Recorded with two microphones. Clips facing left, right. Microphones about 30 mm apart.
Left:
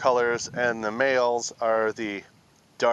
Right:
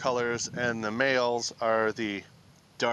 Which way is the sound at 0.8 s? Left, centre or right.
Centre.